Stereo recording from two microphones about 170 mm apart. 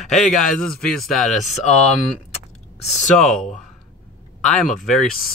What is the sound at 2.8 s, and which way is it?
Speech, 40° left (ahead or behind).